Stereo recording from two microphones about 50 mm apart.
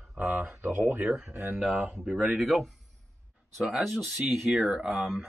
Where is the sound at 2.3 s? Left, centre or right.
Centre.